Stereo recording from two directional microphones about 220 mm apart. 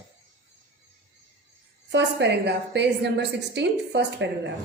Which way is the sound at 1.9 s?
50° right (ahead or behind).